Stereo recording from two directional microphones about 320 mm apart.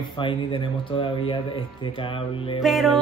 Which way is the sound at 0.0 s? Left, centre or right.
Centre.